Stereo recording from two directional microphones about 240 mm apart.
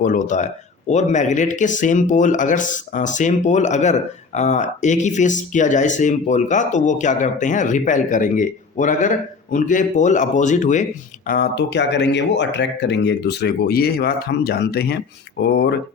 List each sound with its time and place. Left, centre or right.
0.0 s speech: left